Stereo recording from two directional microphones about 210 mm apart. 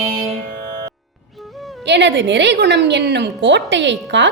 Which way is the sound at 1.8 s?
55° right (ahead or behind).